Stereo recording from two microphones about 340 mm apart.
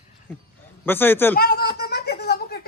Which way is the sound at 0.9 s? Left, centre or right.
Centre.